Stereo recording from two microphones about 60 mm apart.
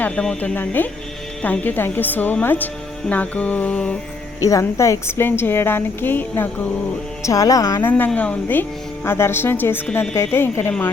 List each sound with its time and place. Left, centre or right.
0.2 s speech: centre
0.5 s a woman's voice: left
3.1 s mantra: left
4.4 s a woman's voice: left
7.2 s speech: left
7.8 s a woman's voice: left
9.0 s a woman's voice: left